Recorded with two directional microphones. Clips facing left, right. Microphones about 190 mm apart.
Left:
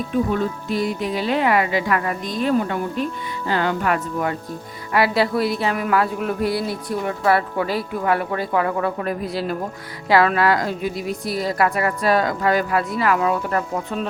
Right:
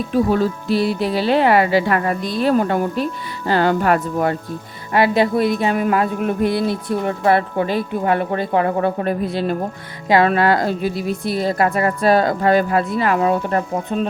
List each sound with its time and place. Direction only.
0.1 s speech: 35° right (ahead or behind)
4.9 s speech: 20° right (ahead or behind)